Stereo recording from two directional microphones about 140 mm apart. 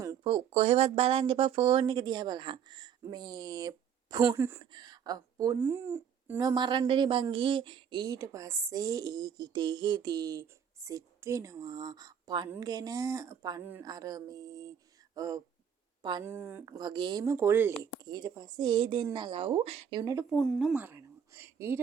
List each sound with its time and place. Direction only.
0.2 s speech: 40° right (ahead or behind); by 4.6 s 15° right (ahead or behind)
4.6 s speech: 30° right (ahead or behind)
5.5 s speech: 15° right (ahead or behind)
6.4 s speech: 30° right (ahead or behind)
13.6 s a woman's voice: 15° right (ahead or behind)
13.8 s speech: 25° right (ahead or behind)
18.0 s speech: 30° right (ahead or behind); by 20.0 s 45° right (ahead or behind)
20.0 s speech: 25° right (ahead or behind)
20.3 s speech: centre (ahead or behind)
20.7 s speech: 15° right (ahead or behind)